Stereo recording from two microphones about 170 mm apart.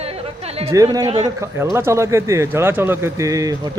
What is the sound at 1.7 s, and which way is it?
Speech, 15° right (ahead or behind).